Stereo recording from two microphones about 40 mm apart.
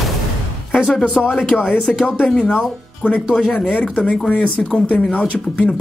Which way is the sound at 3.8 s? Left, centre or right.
Left.